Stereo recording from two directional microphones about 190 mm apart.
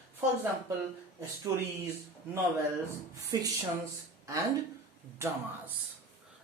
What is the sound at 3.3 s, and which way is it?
Speech, 20° right (ahead or behind).